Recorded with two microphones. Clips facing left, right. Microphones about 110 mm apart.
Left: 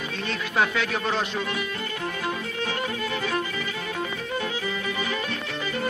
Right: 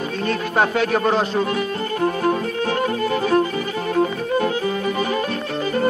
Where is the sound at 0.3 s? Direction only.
45° right (ahead or behind).